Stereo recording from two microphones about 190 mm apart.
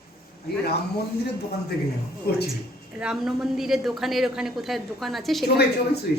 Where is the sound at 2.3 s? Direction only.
55° left (ahead or behind).